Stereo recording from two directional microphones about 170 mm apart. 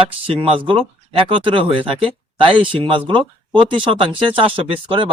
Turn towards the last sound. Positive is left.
turn(degrees=-30)  # may be behind; listen again after turning